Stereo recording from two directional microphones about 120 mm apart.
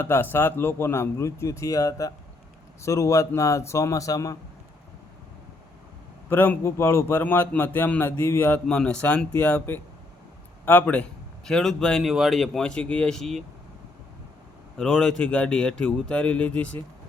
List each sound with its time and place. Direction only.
0.0 s a man's voice: 20° left (ahead or behind)
6.2 s a man's voice: 15° left (ahead or behind)
14.8 s a man's voice: 10° left (ahead or behind)